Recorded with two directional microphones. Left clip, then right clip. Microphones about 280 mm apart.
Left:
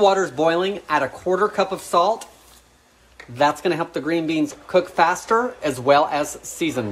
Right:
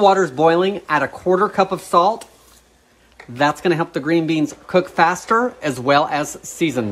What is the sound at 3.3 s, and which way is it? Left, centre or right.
Speech, right.